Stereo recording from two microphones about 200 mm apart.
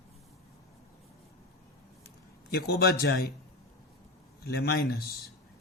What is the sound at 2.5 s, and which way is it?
Speech, 50° left (ahead or behind).